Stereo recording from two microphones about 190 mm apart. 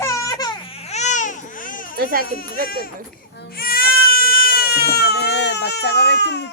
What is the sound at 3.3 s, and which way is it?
Baby cry, 55° left (ahead or behind).